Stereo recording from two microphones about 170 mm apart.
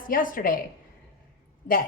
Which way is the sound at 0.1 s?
55° left (ahead or behind).